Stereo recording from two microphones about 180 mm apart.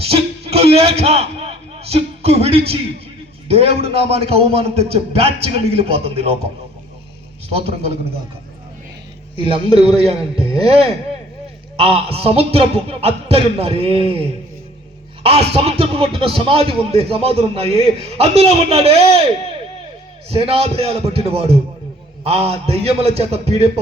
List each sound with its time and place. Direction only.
0.0 s music: 35° right (ahead or behind)
3.5 s speech: 35° right (ahead or behind)
9.3 s speech: 30° right (ahead or behind)
15.2 s speech: 35° right (ahead or behind)
20.3 s speech: 35° right (ahead or behind)